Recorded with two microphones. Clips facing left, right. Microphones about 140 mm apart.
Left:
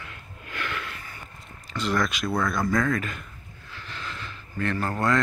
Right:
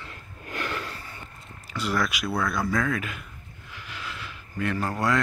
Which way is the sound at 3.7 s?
10° right (ahead or behind).